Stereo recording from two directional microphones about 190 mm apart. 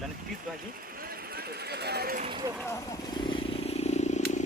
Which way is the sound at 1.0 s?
50° right (ahead or behind).